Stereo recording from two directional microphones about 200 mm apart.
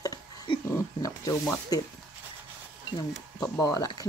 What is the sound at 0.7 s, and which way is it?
Speech, 15° left (ahead or behind).